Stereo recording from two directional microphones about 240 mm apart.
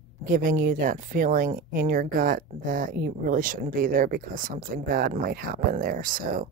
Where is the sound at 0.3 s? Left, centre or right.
Right.